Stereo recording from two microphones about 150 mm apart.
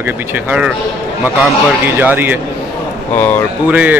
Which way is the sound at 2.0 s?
10° right (ahead or behind).